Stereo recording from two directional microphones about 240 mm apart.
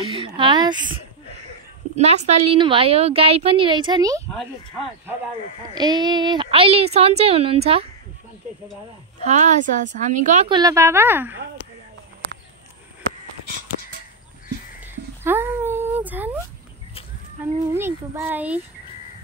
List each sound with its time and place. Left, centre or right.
0.0 s speech: right
2.0 s a woman's voice: right
4.3 s speech: centre
5.8 s a woman's voice: centre
9.2 s a woman's voice: right; by 11.4 s centre
15.2 s a sound: centre
17.7 s a child's voice: centre